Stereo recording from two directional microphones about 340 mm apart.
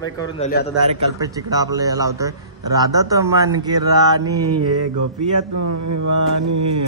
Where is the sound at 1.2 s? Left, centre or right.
Centre.